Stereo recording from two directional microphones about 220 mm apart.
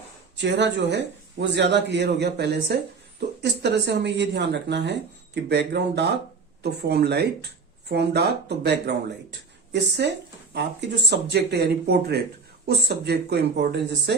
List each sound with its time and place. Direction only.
0.3 s speech: 50° right (ahead or behind)